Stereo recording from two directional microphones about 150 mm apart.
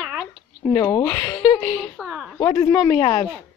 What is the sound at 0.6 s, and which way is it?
Speech, 15° left (ahead or behind).